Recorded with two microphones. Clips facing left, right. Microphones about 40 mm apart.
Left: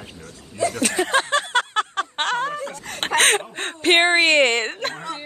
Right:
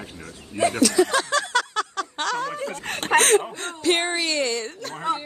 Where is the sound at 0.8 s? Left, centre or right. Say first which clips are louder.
Right 1 dB; left.